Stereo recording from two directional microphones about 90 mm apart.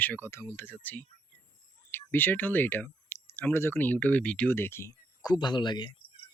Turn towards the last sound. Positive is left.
turn(degrees=60)  # may be behind; listen again after turning